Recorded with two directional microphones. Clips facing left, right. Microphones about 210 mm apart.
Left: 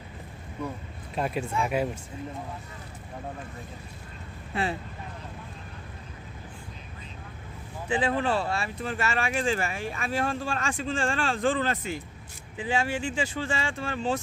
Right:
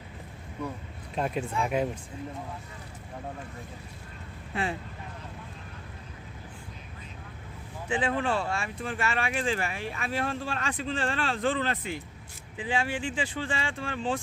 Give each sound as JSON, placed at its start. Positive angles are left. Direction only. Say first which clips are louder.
{"t": 1.1, "sound": "speech", "louder": "left 1 dB", "side_deg": 5}
{"t": 4.5, "sound": "speech", "louder": "left 2 dB", "side_deg": 35}
{"t": 7.9, "sound": "speech", "louder": "left 2 dB", "side_deg": 35}